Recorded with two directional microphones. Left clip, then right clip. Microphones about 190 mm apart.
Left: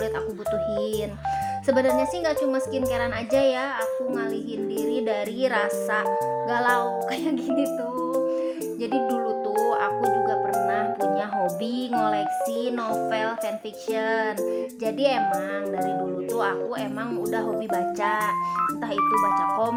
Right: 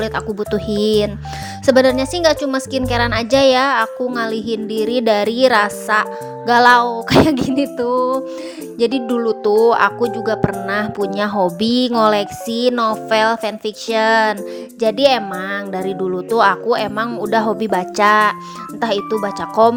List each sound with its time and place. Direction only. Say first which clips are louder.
0.5 s a woman's voice: right 10 dB; 40° right (ahead or behind)
16.3 s a woman's voice: right 14 dB; 35° right (ahead or behind)